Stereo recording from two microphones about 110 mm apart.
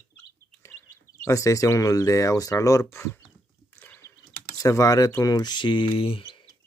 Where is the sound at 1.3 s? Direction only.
30° left (ahead or behind).